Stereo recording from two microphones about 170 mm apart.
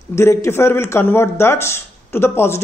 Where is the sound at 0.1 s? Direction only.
15° left (ahead or behind).